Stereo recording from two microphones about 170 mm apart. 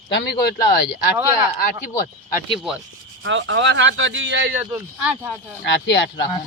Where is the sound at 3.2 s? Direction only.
90° right.